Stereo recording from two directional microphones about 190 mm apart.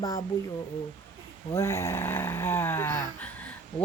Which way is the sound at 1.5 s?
15° left (ahead or behind).